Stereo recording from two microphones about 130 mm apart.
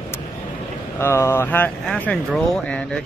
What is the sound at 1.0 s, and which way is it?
Speech, 20° left (ahead or behind).